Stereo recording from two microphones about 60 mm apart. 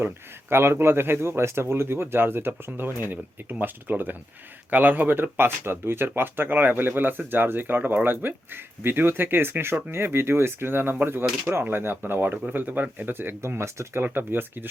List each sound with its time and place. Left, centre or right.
0.5 s speech: right